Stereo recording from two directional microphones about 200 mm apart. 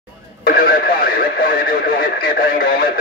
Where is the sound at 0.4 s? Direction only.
45° left (ahead or behind).